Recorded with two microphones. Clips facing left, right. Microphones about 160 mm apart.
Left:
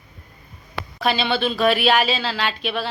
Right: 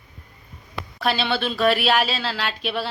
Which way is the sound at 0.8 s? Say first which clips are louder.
Left 2 dB; 75° left (ahead or behind).